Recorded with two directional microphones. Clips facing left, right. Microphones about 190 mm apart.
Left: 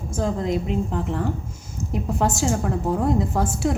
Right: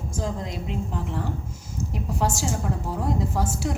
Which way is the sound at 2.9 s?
55° left (ahead or behind).